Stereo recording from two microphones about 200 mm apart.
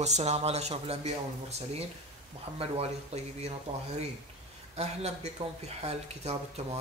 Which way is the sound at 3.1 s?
30° right (ahead or behind).